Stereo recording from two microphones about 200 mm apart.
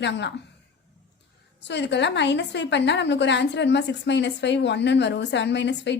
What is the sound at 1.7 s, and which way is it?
A woman's voice, 60° left (ahead or behind).